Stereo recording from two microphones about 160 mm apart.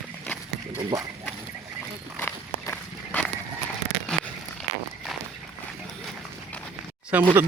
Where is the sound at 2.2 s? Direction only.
10° left (ahead or behind).